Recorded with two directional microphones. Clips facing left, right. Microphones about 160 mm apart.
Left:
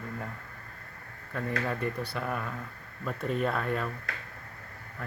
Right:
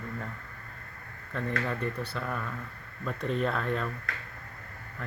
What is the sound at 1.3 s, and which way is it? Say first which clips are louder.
Speech: even; 10° left (ahead or behind).